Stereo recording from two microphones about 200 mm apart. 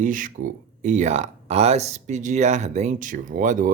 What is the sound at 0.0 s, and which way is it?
Speech, 40° right (ahead or behind).